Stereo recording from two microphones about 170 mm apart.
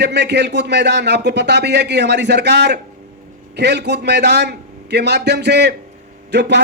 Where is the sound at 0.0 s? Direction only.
90° right.